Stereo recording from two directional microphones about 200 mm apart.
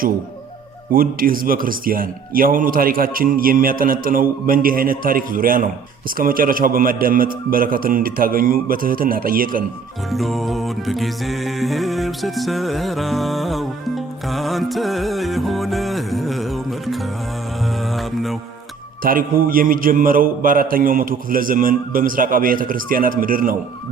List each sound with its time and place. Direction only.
0.9 s a man's voice: 45° right (ahead or behind)
10.1 s music: centre (ahead or behind)
19.0 s a man's voice: 45° right (ahead or behind)